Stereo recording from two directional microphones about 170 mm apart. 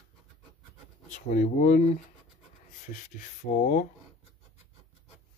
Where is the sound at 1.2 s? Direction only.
45° left (ahead or behind).